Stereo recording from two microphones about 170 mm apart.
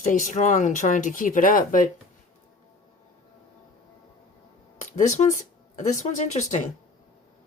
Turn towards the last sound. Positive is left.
turn(degrees=45)  # may be behind; listen again after turning